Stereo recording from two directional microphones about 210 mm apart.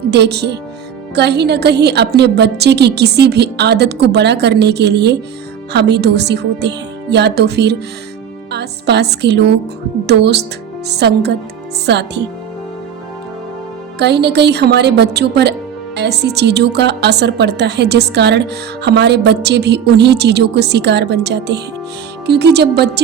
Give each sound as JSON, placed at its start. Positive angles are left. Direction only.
{"t": 0.1, "sound": "a woman's voice", "side_deg": -50}
{"t": 14.0, "sound": "a woman's voice", "side_deg": -55}